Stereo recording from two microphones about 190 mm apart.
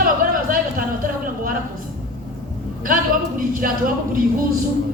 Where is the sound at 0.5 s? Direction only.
45° right (ahead or behind).